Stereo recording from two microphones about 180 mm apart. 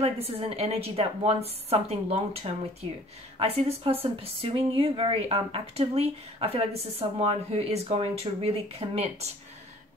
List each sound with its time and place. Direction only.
0.0 s speech: 35° right (ahead or behind)